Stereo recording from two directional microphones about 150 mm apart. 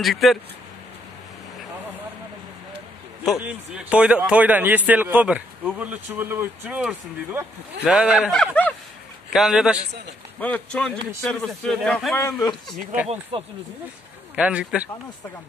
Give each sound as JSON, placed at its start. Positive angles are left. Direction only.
{"t": 0.0, "sound": "speech", "side_deg": 0}
{"t": 3.4, "sound": "speech", "side_deg": -5}
{"t": 10.4, "sound": "speech", "side_deg": 10}
{"t": 12.2, "sound": "speech", "side_deg": 15}
{"t": 13.3, "sound": "speech", "side_deg": -35}
{"t": 14.3, "sound": "speech", "side_deg": -10}